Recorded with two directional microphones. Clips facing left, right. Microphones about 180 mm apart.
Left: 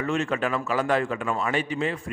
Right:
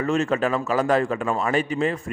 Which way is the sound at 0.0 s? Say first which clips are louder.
Right 4 dB; 40° right (ahead or behind).